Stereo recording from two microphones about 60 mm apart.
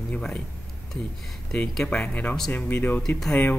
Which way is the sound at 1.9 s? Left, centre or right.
Left.